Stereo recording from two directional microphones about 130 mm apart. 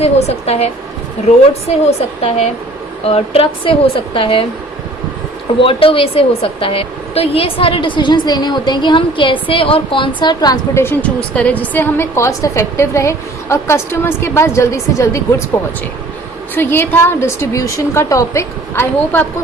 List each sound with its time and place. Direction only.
0.0 s a woman's voice: 50° left (ahead or behind)
5.5 s a woman's voice: 45° left (ahead or behind)
10.8 s a woman's voice: 10° left (ahead or behind)
16.6 s a woman's voice: 15° left (ahead or behind)